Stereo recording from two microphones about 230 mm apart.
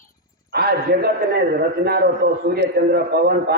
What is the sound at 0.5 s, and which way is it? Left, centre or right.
A man's voice, right.